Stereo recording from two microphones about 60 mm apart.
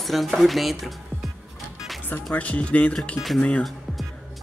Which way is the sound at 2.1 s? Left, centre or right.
Left.